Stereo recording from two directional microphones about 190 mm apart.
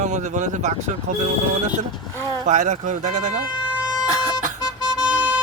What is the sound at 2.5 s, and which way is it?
Speech, 40° right (ahead or behind).